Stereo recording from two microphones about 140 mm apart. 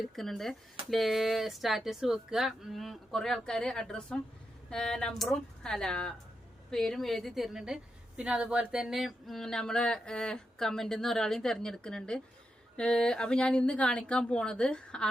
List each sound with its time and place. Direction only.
0.0 s a woman's voice: centre (ahead or behind)